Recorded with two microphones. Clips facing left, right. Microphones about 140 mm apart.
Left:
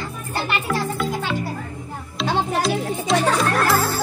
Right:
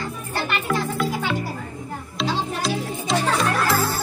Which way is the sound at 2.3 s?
55° left (ahead or behind).